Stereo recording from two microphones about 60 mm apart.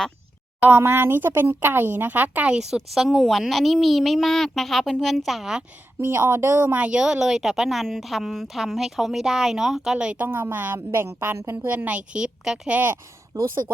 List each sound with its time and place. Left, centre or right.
0.8 s a woman's voice: right
2.6 s a woman's voice: centre
6.0 s a woman's voice: right
7.0 s a woman's voice: centre
10.2 s a woman's voice: right
10.9 s speech: right
11.7 s a woman's voice: right
13.3 s speech: right